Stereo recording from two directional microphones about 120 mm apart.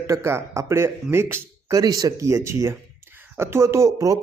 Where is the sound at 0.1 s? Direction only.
25° right (ahead or behind).